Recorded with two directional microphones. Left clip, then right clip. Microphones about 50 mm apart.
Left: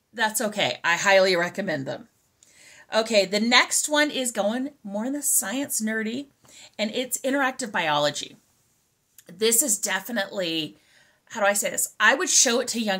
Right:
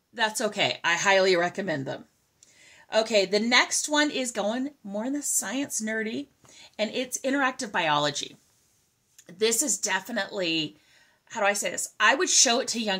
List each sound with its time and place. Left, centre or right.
0.1 s speech: left
9.1 s speech: left